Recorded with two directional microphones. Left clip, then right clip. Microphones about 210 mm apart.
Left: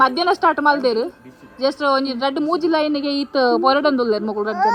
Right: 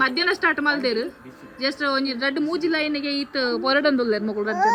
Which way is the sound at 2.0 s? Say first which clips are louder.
Left 3 dB; 10° left (ahead or behind).